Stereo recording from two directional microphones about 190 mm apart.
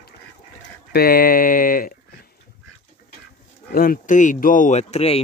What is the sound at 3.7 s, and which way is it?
Speech, 50° left (ahead or behind).